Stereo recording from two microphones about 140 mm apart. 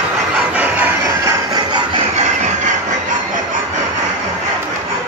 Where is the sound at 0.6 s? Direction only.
10° right (ahead or behind).